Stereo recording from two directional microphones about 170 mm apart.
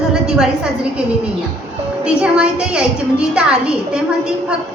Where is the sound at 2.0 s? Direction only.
5° right (ahead or behind).